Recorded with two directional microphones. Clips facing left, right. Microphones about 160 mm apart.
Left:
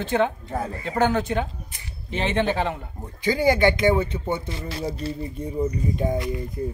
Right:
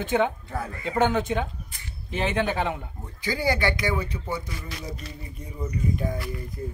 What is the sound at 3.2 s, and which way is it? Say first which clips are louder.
Speech: left 6 dB; 20° left (ahead or behind).